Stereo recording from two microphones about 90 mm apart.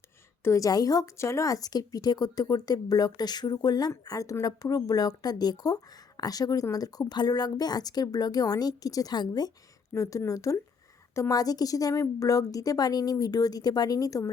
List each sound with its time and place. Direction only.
0.4 s a woman's voice: 35° left (ahead or behind)
9.9 s a woman's voice: 35° left (ahead or behind)